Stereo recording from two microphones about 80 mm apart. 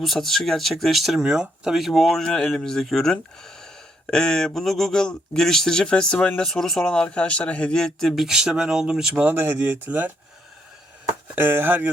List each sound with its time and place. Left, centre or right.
0.0 s speech: centre
9.3 s speech: right
11.3 s speech: right